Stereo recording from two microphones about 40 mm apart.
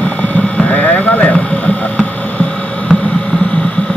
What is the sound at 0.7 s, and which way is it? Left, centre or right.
Sheep, left.